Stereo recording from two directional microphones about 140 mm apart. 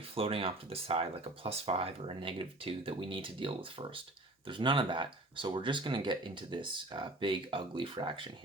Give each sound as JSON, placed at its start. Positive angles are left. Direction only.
{"t": 0.1, "sound": "speech", "side_deg": -40}